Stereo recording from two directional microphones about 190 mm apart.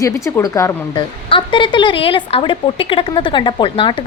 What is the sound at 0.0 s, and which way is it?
A woman's voice, 15° left (ahead or behind).